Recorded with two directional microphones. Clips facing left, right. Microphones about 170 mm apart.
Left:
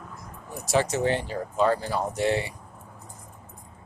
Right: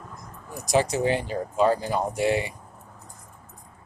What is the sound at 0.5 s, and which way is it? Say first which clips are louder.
Speech: right 1 dB; 15° right (ahead or behind).